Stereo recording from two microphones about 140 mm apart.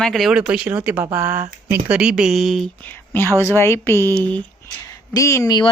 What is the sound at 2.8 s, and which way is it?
Speech, 15° left (ahead or behind).